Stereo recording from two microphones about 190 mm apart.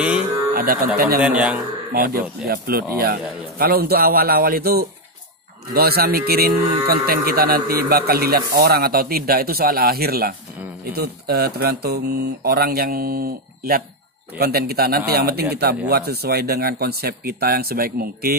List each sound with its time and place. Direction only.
0.0 s a sound: 5° right (ahead or behind)
0.6 s speech: 50° right (ahead or behind)
1.2 s a man's voice: 5° right (ahead or behind)
1.9 s speech: 50° right (ahead or behind)